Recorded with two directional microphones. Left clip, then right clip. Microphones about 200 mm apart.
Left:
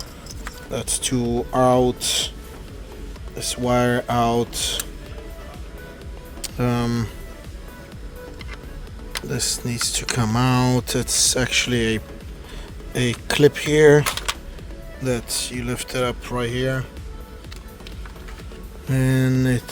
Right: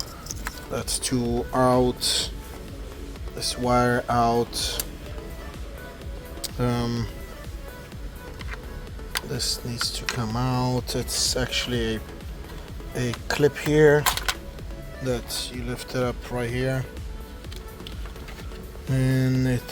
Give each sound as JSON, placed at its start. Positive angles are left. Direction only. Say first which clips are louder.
{"t": 0.7, "sound": "speech", "louder": "left 3 dB", "side_deg": 15}
{"t": 3.3, "sound": "speech", "louder": "left 2 dB", "side_deg": 15}
{"t": 6.4, "sound": "speech", "louder": "left 3 dB", "side_deg": 15}
{"t": 9.3, "sound": "speech", "louder": "left 6 dB", "side_deg": 25}
{"t": 15.0, "sound": "speech", "louder": "left 4 dB", "side_deg": 25}
{"t": 18.9, "sound": "speech", "louder": "left 4 dB", "side_deg": 15}